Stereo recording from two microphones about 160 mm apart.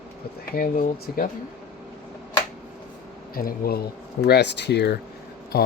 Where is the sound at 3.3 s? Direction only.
70° left (ahead or behind); by 4.9 s 90° left.